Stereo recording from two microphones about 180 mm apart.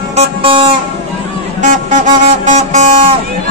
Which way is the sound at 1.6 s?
45° right (ahead or behind).